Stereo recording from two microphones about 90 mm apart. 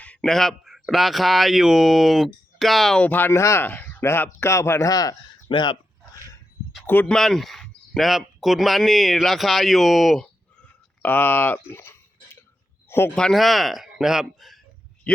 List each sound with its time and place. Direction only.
0.0 s speech: 10° left (ahead or behind)
3.0 s speech: 20° left (ahead or behind)
4.9 s speech: 45° left (ahead or behind)
5.5 s speech: 60° left (ahead or behind)
6.8 s speech: 20° left (ahead or behind)
7.1 s speech: 5° left (ahead or behind)
11.0 s speech: 20° left (ahead or behind)
11.7 s a sound: 25° left (ahead or behind)
13.1 s speech: 5° left (ahead or behind)